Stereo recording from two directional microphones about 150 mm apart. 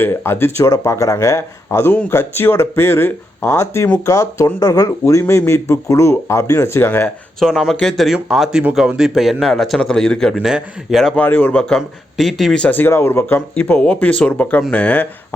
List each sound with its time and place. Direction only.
0.0 s speech: 15° left (ahead or behind)
7.3 s speech: centre (ahead or behind)